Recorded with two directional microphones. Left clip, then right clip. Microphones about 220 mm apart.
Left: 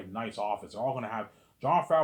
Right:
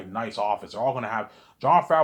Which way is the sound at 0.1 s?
20° right (ahead or behind).